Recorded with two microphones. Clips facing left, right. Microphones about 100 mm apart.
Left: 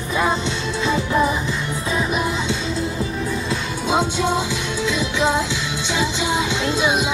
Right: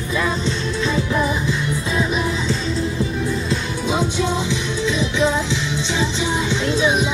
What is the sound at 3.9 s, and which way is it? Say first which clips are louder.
Music: left 1 dB; 65° left (ahead or behind).